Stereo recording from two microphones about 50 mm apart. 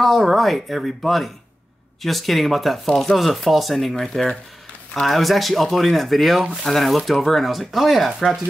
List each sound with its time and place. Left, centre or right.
0.0 s speech: centre